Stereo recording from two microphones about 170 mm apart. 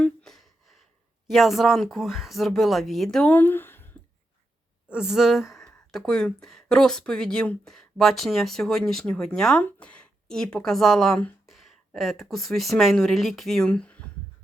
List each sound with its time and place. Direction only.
0.0 s gasp: 5° left (ahead or behind)
1.3 s speech: centre (ahead or behind)
4.9 s speech: 5° right (ahead or behind)